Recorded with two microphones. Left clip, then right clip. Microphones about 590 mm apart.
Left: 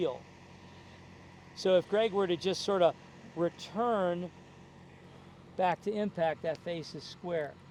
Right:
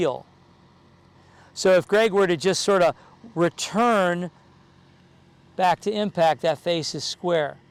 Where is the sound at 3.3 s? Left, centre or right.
Right.